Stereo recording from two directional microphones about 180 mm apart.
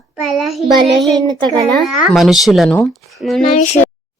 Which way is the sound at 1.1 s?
25° right (ahead or behind).